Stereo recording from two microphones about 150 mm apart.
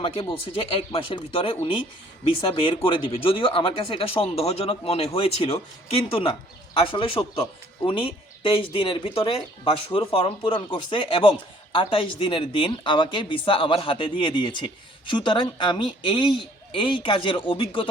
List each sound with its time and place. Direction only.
0.0 s speech: 35° left (ahead or behind)